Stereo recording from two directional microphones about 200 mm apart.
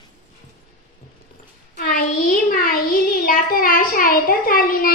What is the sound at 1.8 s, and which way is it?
Child singing, 45° left (ahead or behind).